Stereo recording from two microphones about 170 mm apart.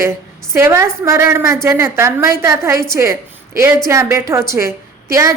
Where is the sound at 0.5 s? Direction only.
15° right (ahead or behind).